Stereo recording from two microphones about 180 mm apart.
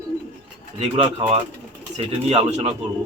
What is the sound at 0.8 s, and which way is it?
Speech, 35° right (ahead or behind).